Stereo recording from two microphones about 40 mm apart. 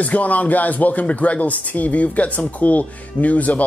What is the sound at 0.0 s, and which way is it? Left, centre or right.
Speech, left.